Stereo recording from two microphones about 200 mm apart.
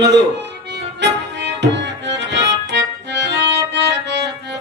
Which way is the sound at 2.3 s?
60° right (ahead or behind).